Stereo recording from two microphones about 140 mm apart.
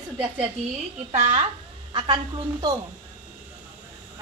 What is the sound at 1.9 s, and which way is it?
Speech, 35° right (ahead or behind).